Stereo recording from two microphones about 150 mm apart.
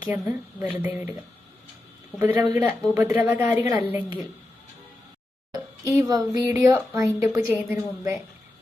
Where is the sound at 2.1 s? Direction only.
20° right (ahead or behind).